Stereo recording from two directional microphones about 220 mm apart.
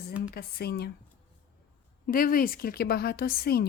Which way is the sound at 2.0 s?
40° left (ahead or behind).